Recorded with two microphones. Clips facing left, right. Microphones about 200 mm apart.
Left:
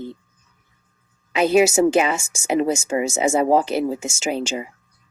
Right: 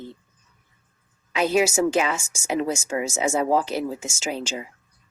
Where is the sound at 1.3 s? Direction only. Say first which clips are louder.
Left 5 dB; 60° left (ahead or behind).